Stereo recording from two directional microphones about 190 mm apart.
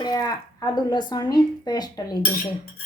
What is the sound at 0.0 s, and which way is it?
A woman's voice, 20° left (ahead or behind).